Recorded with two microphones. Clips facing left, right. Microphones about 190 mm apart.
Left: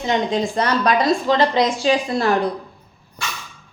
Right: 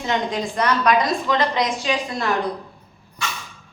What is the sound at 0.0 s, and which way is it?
Speech, 25° left (ahead or behind).